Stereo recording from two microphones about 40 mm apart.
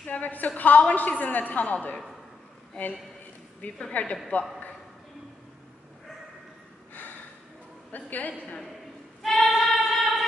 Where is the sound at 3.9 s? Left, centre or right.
Left.